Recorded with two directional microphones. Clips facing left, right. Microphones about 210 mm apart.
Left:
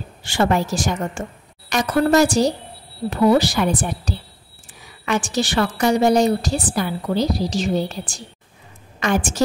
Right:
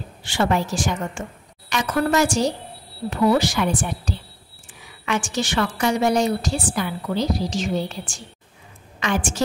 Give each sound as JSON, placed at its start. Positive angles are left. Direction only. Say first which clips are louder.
{"t": 0.2, "sound": "a woman's voice", "louder": "left 2 dB", "side_deg": 45}